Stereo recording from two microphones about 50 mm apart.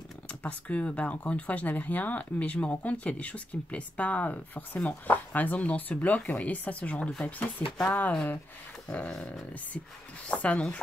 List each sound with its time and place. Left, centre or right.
0.3 s speech: left
10.2 s speech: left